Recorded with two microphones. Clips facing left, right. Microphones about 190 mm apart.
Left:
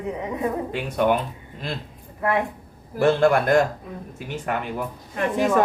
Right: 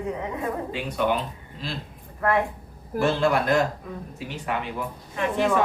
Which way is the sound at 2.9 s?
50° left (ahead or behind).